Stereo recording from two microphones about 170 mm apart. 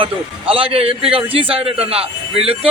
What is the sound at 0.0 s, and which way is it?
A man's voice, 30° right (ahead or behind).